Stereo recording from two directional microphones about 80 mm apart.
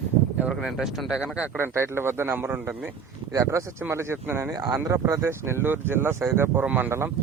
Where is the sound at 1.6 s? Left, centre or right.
Right.